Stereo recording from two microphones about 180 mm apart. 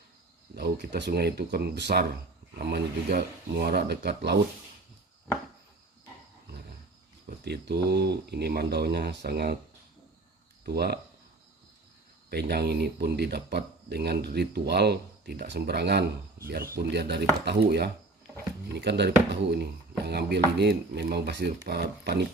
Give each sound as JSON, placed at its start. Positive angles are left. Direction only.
{"t": 0.5, "sound": "speech", "side_deg": -70}
{"t": 7.3, "sound": "speech", "side_deg": -65}
{"t": 10.7, "sound": "speech", "side_deg": -60}
{"t": 12.3, "sound": "speech", "side_deg": -65}